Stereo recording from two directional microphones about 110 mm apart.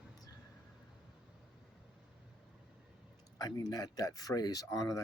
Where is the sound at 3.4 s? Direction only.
35° left (ahead or behind).